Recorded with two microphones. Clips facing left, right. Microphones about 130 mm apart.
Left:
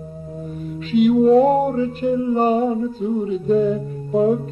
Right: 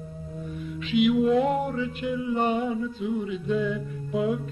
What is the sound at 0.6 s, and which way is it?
Music, 40° left (ahead or behind).